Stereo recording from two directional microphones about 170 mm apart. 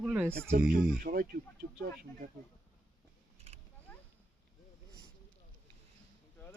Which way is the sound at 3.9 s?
10° left (ahead or behind).